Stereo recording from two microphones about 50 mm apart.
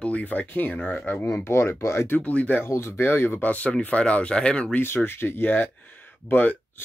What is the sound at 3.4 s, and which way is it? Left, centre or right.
Speech, left.